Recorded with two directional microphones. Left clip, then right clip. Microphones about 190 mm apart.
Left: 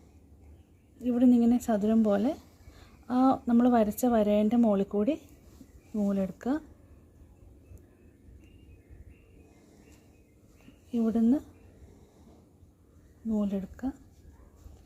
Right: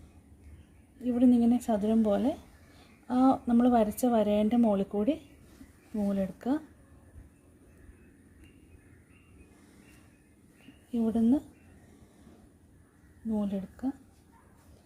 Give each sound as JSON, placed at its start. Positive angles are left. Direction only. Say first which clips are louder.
{"t": 1.0, "sound": "speech", "louder": "left 1 dB", "side_deg": 20}
{"t": 10.9, "sound": "speech", "louder": "left 1 dB", "side_deg": 20}
{"t": 13.2, "sound": "speech", "louder": "left 2 dB", "side_deg": 20}